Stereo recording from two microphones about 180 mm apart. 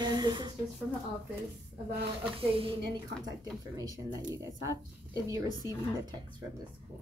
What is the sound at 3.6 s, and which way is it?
Speech, 20° right (ahead or behind).